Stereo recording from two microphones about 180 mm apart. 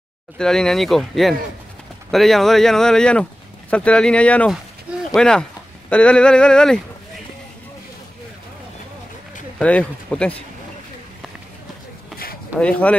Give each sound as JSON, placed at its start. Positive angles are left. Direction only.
{"t": 0.4, "sound": "speech", "side_deg": 5}
{"t": 9.6, "sound": "speech", "side_deg": 5}
{"t": 12.5, "sound": "speech", "side_deg": 5}